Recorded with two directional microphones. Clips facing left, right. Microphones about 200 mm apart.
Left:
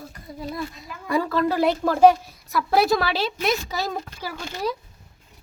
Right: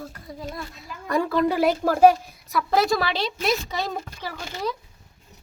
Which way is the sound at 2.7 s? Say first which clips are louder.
Left 2 dB; 10° left (ahead or behind).